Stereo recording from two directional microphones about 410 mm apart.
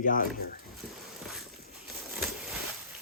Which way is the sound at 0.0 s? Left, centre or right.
Centre.